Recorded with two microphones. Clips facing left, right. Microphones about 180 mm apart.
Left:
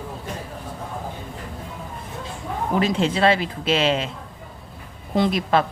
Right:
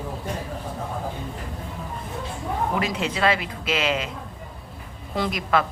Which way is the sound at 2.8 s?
30° left (ahead or behind).